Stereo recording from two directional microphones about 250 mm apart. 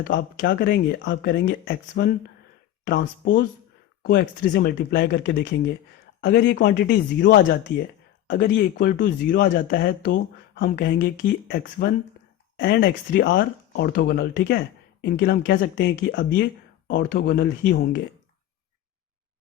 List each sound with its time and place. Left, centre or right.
0.1 s speech: left